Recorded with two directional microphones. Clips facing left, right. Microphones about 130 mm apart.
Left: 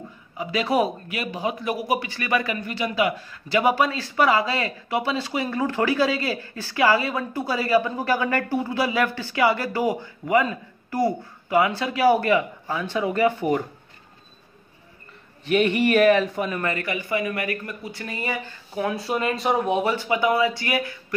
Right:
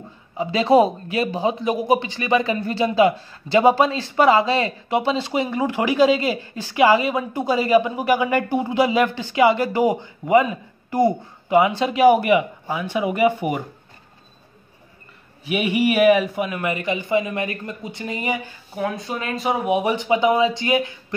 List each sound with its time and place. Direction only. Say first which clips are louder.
0.4 s speech: right 6 dB; 25° right (ahead or behind)
15.4 s speech: even; 10° right (ahead or behind)
16.7 s speech: right 5 dB; 20° right (ahead or behind)
18.8 s speech: left 1 dB; centre (ahead or behind); by 21.0 s 20° right (ahead or behind)